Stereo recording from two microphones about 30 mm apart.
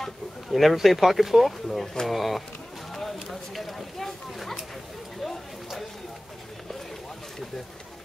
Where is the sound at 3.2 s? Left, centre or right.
Centre.